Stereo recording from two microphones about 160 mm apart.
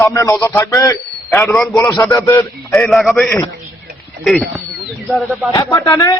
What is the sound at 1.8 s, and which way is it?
Speech, 20° left (ahead or behind).